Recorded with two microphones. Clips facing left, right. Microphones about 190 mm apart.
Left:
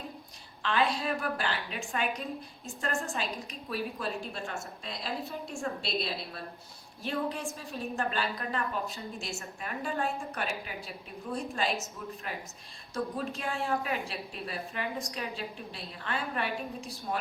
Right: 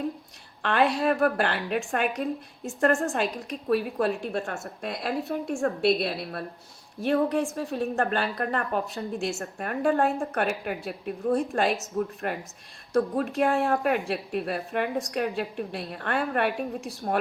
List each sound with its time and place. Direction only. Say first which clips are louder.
0.6 s a woman's voice: right 6 dB; 60° right (ahead or behind)